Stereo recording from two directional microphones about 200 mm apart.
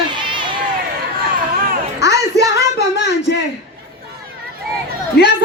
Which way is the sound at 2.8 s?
60° left (ahead or behind).